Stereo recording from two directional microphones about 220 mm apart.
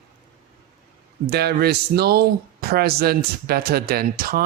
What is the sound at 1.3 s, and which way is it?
Speech, 45° right (ahead or behind).